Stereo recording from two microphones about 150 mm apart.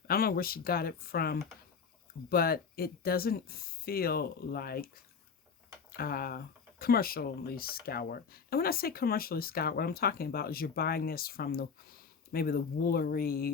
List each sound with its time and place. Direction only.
0.1 s speech: 85° left
6.0 s speech: 90° left